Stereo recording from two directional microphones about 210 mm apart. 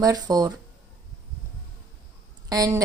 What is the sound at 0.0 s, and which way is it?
Speech, 20° right (ahead or behind).